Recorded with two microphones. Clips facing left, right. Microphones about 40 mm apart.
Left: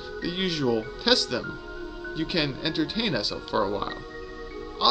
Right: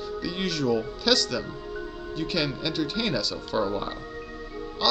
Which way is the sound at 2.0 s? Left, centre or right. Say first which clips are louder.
Left 1 dB; centre.